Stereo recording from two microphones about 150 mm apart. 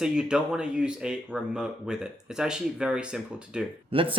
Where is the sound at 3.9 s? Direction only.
35° right (ahead or behind).